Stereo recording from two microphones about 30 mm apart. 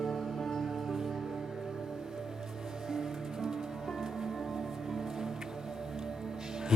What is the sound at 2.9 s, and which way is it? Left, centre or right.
Music, centre.